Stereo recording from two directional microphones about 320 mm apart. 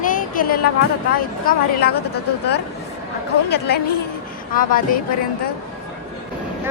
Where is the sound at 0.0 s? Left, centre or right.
Left.